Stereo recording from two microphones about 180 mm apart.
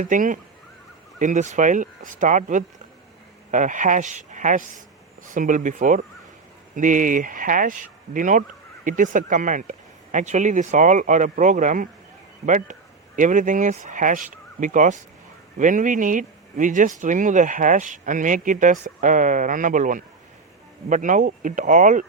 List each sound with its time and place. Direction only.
0.0 s speech: 45° right (ahead or behind)